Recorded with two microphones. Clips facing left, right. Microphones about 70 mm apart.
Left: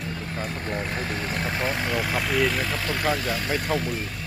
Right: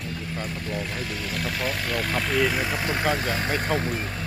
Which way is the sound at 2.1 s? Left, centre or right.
Centre.